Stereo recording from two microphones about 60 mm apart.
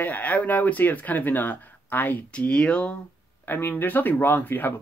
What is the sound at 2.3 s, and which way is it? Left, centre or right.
Speech, centre.